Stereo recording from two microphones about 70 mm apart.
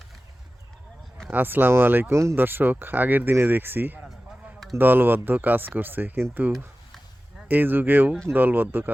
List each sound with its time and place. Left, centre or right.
1.3 s speech: right